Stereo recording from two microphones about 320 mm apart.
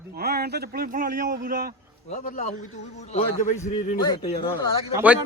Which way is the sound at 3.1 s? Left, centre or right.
Centre.